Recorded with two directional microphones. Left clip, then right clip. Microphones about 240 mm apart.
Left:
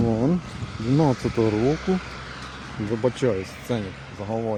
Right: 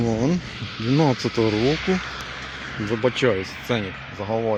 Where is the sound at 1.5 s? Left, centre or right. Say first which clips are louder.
Right 2 dB; left.